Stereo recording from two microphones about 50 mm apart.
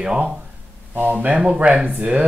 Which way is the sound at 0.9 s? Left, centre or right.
Right.